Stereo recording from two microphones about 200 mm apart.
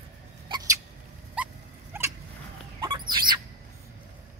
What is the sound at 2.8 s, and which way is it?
Bird, 20° right (ahead or behind).